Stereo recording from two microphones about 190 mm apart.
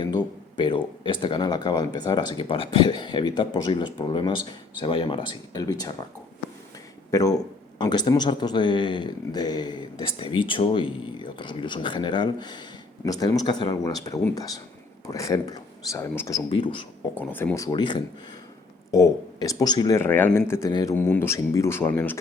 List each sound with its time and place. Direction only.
0.0 s a sound: 25° left (ahead or behind)
1.0 s speech: 25° left (ahead or behind)
7.1 s speech: 20° left (ahead or behind)
16.5 s speech: 25° left (ahead or behind)
17.2 s speech: 10° left (ahead or behind)